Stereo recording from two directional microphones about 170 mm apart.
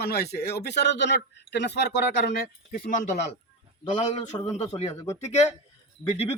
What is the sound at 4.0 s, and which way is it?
Speech, 40° left (ahead or behind).